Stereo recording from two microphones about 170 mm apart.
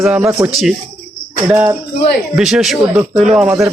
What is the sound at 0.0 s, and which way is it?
A man's voice, 15° right (ahead or behind).